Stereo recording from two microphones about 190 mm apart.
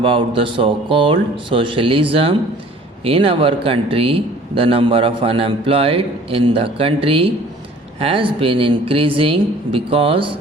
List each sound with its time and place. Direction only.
0.0 s speech: 30° right (ahead or behind)